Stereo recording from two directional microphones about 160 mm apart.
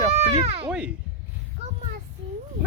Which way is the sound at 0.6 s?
10° right (ahead or behind).